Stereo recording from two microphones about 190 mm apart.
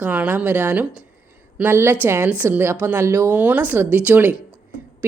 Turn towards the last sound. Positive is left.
turn(degrees=-10)  # may be behind; listen again after turning